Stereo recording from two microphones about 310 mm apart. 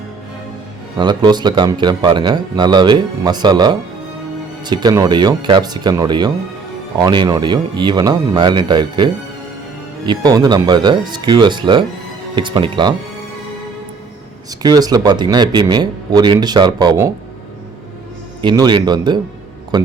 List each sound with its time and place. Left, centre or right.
0.9 s a man's voice: centre
10.1 s a man's voice: centre
14.6 s a man's voice: centre
18.4 s a man's voice: centre